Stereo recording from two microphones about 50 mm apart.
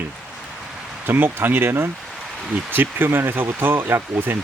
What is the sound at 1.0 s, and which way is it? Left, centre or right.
Speech, right.